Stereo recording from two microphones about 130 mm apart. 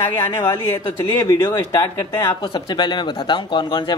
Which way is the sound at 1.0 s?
25° left (ahead or behind).